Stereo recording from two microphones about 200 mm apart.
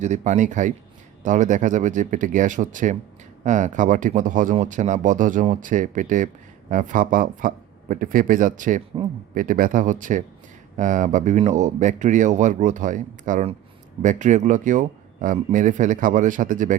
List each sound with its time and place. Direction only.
0.0 s speech: 35° right (ahead or behind)